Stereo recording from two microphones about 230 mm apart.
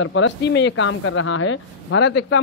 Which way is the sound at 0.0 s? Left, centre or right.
Left.